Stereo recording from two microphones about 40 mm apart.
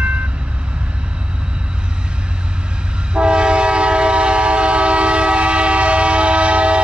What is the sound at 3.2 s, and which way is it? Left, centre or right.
Train, right.